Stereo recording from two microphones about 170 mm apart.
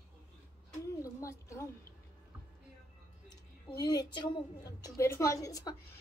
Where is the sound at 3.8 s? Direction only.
25° left (ahead or behind).